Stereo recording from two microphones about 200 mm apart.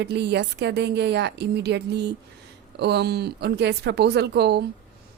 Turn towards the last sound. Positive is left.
turn(degrees=-55)  # may be behind; listen again after turning